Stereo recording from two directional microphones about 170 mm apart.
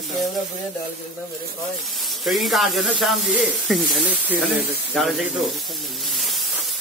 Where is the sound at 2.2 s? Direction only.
Centre (ahead or behind).